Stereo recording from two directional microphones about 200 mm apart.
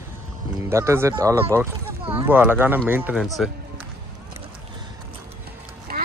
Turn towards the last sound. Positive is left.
turn(degrees=-50)  # may be behind; listen again after turning